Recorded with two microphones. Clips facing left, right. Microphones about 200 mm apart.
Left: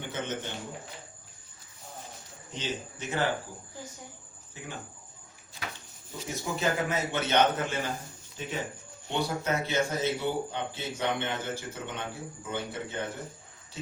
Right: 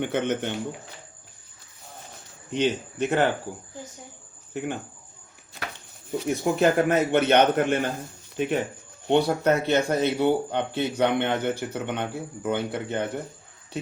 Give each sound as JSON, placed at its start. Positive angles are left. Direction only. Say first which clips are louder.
{"t": 0.0, "sound": "speech", "louder": "right 9 dB", "side_deg": -60}
{"t": 2.5, "sound": "speech", "louder": "right 11 dB", "side_deg": -65}
{"t": 4.5, "sound": "speech", "louder": "right 14 dB", "side_deg": -60}
{"t": 6.1, "sound": "speech", "louder": "right 10 dB", "side_deg": -60}